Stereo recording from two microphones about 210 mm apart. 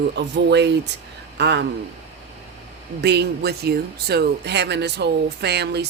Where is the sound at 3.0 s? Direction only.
50° right (ahead or behind).